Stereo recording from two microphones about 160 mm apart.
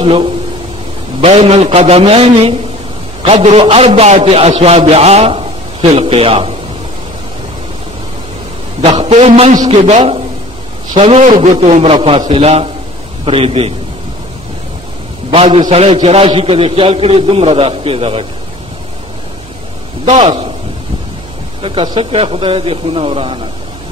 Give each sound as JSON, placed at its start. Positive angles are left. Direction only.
{"t": 0.0, "sound": "a man's voice", "side_deg": -35}
{"t": 8.8, "sound": "a man's voice", "side_deg": -30}
{"t": 15.3, "sound": "a man's voice", "side_deg": -35}
{"t": 20.1, "sound": "a man's voice", "side_deg": -40}
{"t": 21.5, "sound": "a man's voice", "side_deg": -35}